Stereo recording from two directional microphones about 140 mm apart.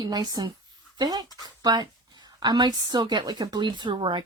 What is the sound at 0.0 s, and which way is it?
Speech, 25° right (ahead or behind).